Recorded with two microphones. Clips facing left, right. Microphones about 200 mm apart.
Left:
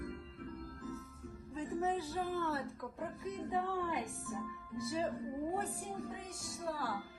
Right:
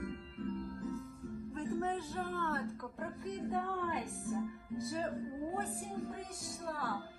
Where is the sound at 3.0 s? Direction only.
Centre (ahead or behind).